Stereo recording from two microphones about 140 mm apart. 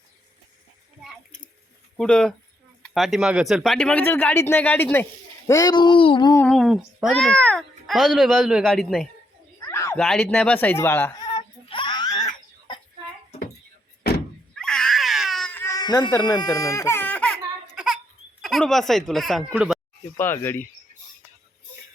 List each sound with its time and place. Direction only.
2.0 s speech: 5° left (ahead or behind)
5.5 s speech: 25° left (ahead or behind)
6.5 s speech: centre (ahead or behind)
9.6 s a sound: 20° left (ahead or behind)
10.0 s speech: 5° left (ahead or behind)
11.2 s baby cry: 35° left (ahead or behind)
14.5 s a sound: 5° left (ahead or behind)
15.5 s baby cry: 25° left (ahead or behind); by 17.4 s 5° left (ahead or behind)
18.4 s speech: centre (ahead or behind)
20.1 s speech: 15° left (ahead or behind)